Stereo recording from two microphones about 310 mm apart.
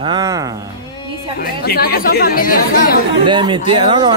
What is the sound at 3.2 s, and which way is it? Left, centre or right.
Speech, centre.